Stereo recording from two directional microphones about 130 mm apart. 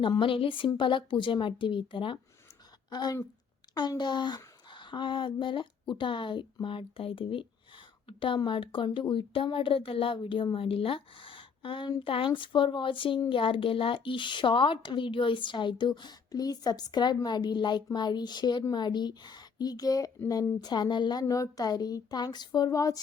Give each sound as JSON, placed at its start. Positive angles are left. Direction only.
{"t": 0.0, "sound": "speech", "side_deg": 40}
{"t": 20.6, "sound": "speech", "side_deg": 30}